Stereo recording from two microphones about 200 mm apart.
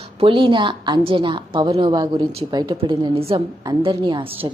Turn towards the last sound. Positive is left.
turn(degrees=-25)  # may be behind; listen again after turning